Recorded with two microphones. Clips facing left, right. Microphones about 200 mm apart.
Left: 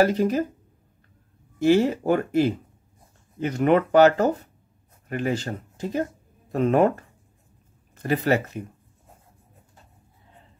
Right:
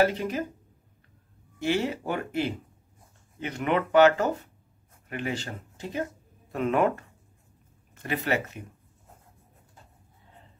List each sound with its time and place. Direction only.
0.0 s speech: 40° left (ahead or behind)
1.6 s speech: 40° left (ahead or behind)